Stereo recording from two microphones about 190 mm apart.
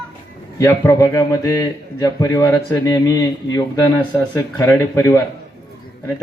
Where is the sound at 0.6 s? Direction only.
15° left (ahead or behind).